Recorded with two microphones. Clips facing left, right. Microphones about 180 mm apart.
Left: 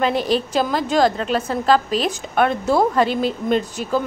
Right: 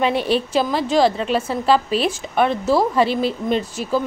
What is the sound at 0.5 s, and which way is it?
A woman's voice, 5° right (ahead or behind).